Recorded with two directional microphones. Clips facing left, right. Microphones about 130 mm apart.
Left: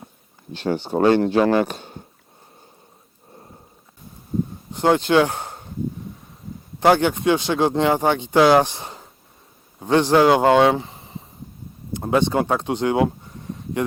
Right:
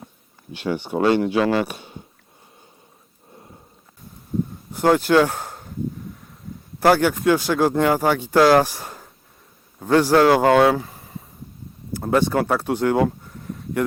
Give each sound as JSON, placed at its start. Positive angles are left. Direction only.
{"t": 0.9, "sound": "speech", "side_deg": 40}
{"t": 4.7, "sound": "speech", "side_deg": 20}
{"t": 5.3, "sound": "a sound", "side_deg": 0}
{"t": 6.7, "sound": "speech", "side_deg": 20}
{"t": 9.8, "sound": "speech", "side_deg": 20}
{"t": 13.4, "sound": "a sound", "side_deg": 20}